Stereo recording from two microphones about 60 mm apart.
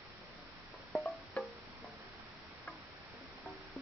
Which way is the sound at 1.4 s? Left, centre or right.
Left.